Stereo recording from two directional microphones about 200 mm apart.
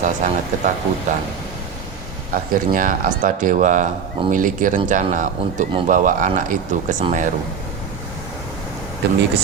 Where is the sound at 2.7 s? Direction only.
45° right (ahead or behind).